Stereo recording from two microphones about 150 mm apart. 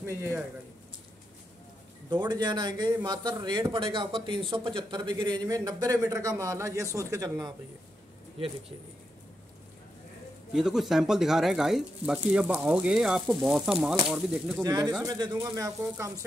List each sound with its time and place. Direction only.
0.0 s speech: 15° right (ahead or behind)
2.0 s speech: 30° right (ahead or behind)
10.5 s speech: centre (ahead or behind)
14.6 s speech: 25° right (ahead or behind)